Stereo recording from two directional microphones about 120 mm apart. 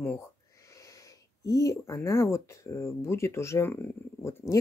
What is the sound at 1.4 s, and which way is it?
Speech, 30° left (ahead or behind).